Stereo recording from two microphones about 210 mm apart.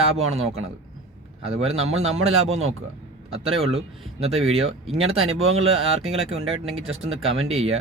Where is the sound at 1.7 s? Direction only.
75° right (ahead or behind).